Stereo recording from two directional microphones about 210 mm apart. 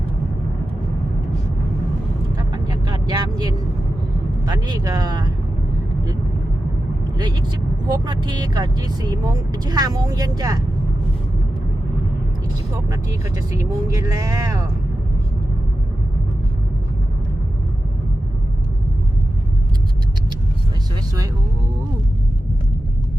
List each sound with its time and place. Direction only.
2.3 s vehicle: 20° right (ahead or behind)
4.4 s speech: 20° right (ahead or behind)
7.2 s speech: 20° right (ahead or behind)
12.7 s speech: 15° right (ahead or behind)